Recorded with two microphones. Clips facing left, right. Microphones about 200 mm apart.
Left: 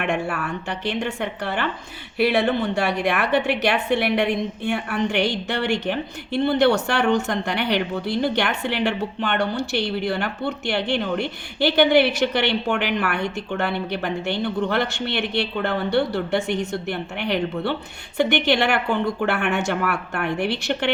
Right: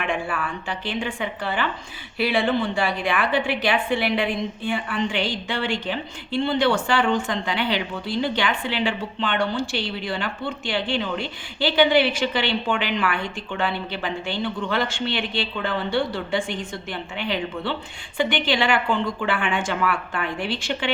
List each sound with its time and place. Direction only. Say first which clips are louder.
0.4 s a woman's voice: left 3 dB; 65° left (ahead or behind)